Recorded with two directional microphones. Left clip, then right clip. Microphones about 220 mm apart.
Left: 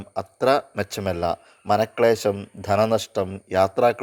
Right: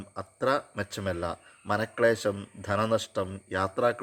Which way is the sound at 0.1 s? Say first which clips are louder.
Left 8 dB; 30° left (ahead or behind).